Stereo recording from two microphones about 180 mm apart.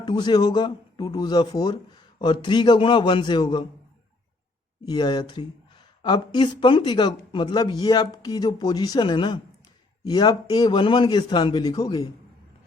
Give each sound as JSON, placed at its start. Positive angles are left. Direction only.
{"t": 0.0, "sound": "speech", "side_deg": 25}
{"t": 4.9, "sound": "speech", "side_deg": 25}